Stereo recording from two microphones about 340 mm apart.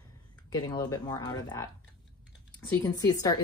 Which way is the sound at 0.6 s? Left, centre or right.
Centre.